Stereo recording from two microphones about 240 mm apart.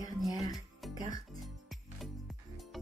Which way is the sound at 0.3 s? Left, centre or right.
Centre.